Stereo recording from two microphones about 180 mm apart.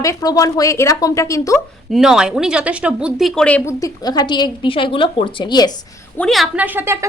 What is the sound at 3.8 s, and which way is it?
A woman's voice, 20° left (ahead or behind).